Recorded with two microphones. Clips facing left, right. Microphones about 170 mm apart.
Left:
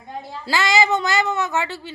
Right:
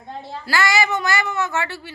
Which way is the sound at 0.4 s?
20° left (ahead or behind).